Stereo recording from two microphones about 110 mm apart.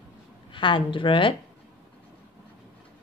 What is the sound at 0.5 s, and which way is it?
Speech, 50° left (ahead or behind).